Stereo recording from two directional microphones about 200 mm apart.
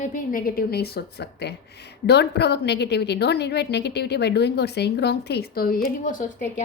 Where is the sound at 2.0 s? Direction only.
55° left (ahead or behind).